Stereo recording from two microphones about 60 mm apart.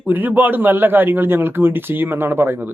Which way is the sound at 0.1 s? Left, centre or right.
Right.